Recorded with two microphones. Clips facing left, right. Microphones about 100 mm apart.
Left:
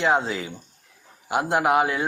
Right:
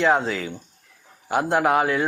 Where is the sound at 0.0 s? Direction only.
20° left (ahead or behind).